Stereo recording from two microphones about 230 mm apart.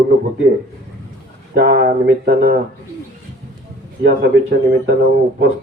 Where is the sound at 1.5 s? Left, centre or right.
Right.